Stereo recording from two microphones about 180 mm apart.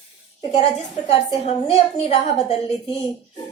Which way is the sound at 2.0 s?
35° left (ahead or behind).